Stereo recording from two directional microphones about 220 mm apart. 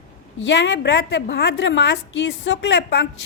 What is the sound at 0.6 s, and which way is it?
A woman's voice, 55° left (ahead or behind).